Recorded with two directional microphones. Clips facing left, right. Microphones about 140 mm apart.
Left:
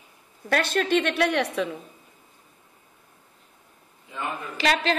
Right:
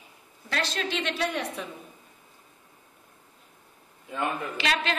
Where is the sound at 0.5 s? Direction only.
55° left (ahead or behind); by 1.7 s 80° left.